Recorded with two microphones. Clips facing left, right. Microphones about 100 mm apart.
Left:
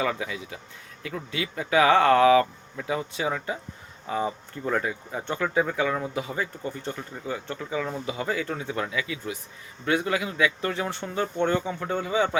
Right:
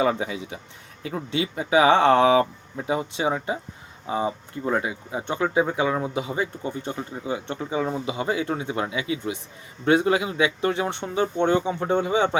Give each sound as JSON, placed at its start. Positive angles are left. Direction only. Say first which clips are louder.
{"t": 0.0, "sound": "speech", "louder": "right 5 dB", "side_deg": -30}